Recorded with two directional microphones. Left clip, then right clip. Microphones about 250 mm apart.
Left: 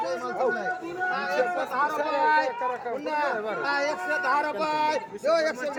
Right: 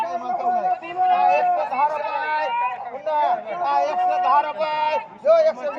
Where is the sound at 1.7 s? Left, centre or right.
Left.